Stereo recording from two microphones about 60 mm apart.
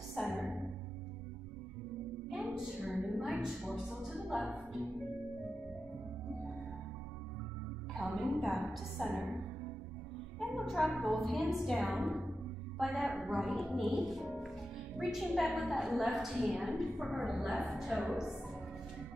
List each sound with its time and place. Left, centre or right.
0.2 s music: centre
2.3 s a sound: centre
7.9 s music: centre
10.5 s a woman's voice: centre